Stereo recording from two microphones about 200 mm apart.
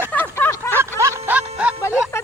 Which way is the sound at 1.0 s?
15° right (ahead or behind).